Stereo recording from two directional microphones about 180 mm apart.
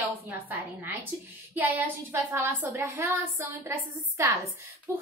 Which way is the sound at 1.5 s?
10° right (ahead or behind).